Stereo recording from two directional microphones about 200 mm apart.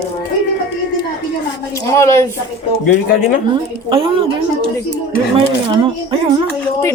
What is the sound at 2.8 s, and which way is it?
Speech, 45° left (ahead or behind).